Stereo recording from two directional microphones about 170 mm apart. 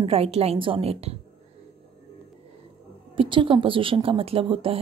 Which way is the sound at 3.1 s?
30° right (ahead or behind).